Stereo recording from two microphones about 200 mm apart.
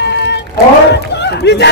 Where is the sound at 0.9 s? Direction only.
60° left (ahead or behind).